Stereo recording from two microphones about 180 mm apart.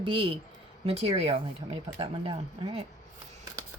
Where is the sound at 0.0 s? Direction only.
30° right (ahead or behind).